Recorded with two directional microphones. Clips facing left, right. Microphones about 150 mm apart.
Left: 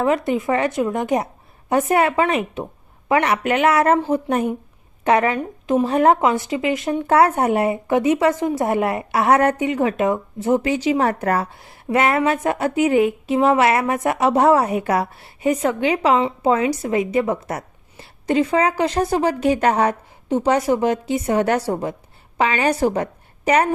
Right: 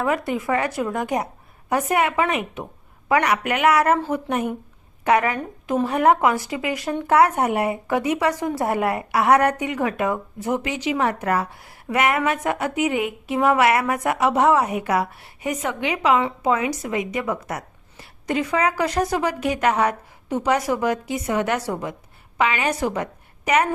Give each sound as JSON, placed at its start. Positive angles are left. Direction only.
{"t": 0.0, "sound": "speech", "side_deg": 25}